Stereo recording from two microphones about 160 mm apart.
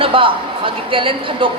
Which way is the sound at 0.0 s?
35° right (ahead or behind).